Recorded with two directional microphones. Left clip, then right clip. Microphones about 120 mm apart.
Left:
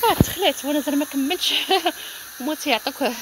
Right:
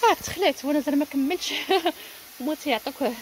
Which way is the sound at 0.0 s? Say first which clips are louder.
Left 2 dB; 5° left (ahead or behind).